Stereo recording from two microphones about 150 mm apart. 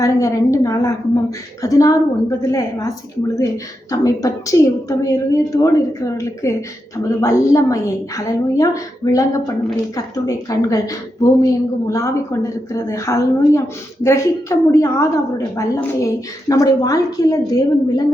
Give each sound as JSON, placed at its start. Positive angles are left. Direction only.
{"t": 0.0, "sound": "a woman's voice", "side_deg": 20}